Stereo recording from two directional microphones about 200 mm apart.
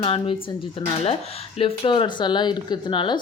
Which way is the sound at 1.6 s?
25° left (ahead or behind).